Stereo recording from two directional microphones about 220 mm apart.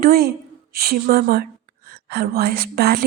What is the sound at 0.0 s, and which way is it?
A woman's voice, 45° right (ahead or behind).